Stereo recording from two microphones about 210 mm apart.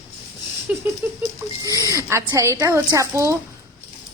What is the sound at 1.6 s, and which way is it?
A woman's voice, 15° right (ahead or behind).